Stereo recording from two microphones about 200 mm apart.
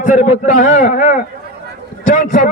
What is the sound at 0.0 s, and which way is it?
A man's voice, 40° left (ahead or behind).